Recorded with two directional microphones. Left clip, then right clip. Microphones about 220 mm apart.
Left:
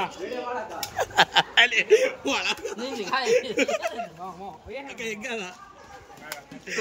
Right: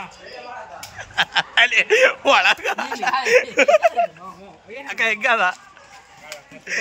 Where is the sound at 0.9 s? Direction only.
20° left (ahead or behind); by 5.6 s centre (ahead or behind).